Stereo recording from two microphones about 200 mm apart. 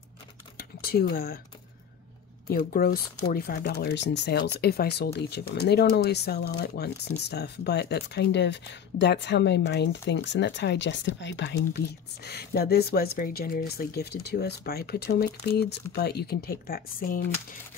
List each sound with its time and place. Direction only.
0.6 s a sound: 50° left (ahead or behind)
1.1 s speech: 50° left (ahead or behind)
2.5 s speech: 50° left (ahead or behind)